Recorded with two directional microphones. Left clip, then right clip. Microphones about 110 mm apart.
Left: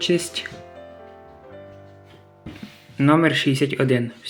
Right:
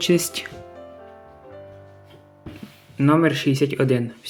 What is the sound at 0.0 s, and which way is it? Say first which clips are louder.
Speech: right 1 dB; 45° right (ahead or behind).